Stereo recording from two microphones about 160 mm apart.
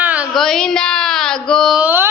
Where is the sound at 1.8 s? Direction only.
10° right (ahead or behind).